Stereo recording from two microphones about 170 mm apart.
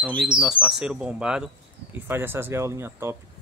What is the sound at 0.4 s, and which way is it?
Speech, 5° right (ahead or behind).